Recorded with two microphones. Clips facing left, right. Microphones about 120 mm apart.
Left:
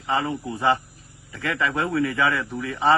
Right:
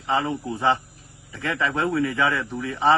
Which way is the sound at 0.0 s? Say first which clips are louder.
Right 1 dB; 20° right (ahead or behind).